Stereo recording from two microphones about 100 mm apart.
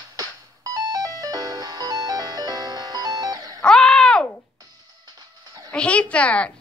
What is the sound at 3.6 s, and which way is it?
Groan, 10° left (ahead or behind).